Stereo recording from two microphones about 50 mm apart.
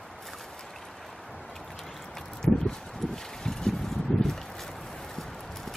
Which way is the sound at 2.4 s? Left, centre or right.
Centre.